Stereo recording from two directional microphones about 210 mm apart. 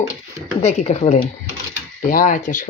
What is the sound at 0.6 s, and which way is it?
Speech, 30° left (ahead or behind).